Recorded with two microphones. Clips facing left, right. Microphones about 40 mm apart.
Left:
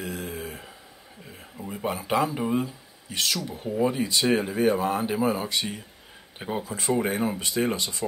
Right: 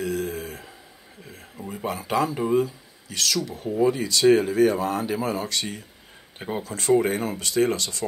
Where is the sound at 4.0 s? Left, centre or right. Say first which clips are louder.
Right 5 dB; left.